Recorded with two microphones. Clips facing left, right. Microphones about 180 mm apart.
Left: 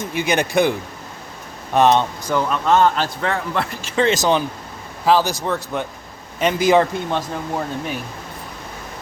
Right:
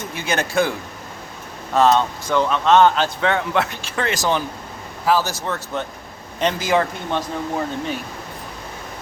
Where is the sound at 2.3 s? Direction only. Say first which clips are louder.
Right 2 dB; 5° left (ahead or behind).